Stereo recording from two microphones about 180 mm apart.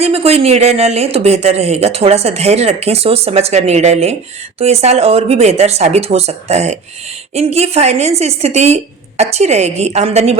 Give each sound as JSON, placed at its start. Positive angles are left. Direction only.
{"t": 0.0, "sound": "speech", "side_deg": -35}